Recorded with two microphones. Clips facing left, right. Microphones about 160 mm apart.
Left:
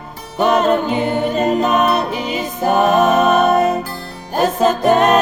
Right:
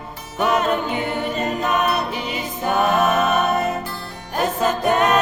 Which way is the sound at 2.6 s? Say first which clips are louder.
Left 5 dB; 35° left (ahead or behind).